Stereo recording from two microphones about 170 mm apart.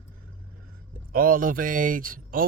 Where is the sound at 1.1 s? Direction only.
60° right (ahead or behind).